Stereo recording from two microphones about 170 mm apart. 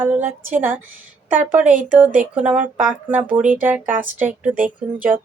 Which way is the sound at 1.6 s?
50° right (ahead or behind).